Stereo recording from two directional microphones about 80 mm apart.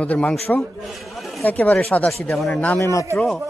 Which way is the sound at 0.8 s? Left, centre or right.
Centre.